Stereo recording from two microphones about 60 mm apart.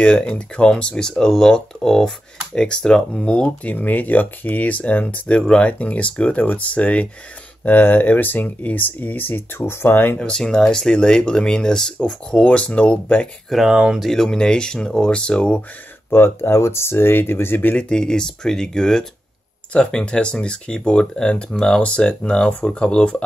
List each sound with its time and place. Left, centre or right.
0.0 s speech: centre
3.7 s speech: left
10.1 s speech: centre
13.5 s speech: centre
16.1 s speech: left
17.8 s speech: centre